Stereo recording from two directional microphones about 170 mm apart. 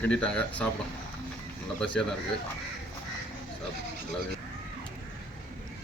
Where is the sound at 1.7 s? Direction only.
5° left (ahead or behind).